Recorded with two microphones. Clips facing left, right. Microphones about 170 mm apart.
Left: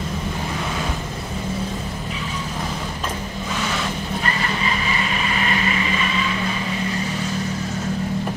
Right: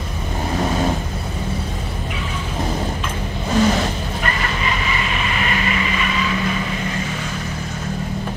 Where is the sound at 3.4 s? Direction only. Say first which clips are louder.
Right 10 dB; 40° right (ahead or behind).